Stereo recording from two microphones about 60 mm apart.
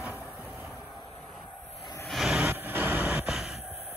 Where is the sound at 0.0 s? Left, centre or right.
Right.